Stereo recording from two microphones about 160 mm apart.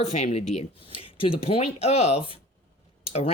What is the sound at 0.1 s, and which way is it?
Speech, 45° left (ahead or behind).